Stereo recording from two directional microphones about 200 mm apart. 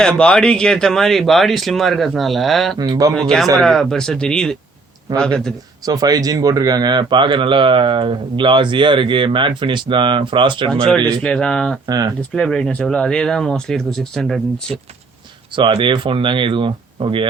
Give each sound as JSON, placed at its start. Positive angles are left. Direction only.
{"t": 0.0, "sound": "speech", "side_deg": 5}
{"t": 2.7, "sound": "speech", "side_deg": -20}
{"t": 3.1, "sound": "speech", "side_deg": 0}
{"t": 5.8, "sound": "speech", "side_deg": -20}
{"t": 11.2, "sound": "speech", "side_deg": 5}
{"t": 15.5, "sound": "speech", "side_deg": -25}